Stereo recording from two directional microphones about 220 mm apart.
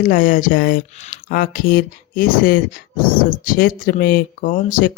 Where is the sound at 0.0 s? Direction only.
35° left (ahead or behind).